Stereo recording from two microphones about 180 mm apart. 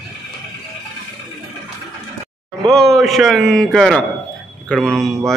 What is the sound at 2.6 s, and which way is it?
A man's voice, centre (ahead or behind).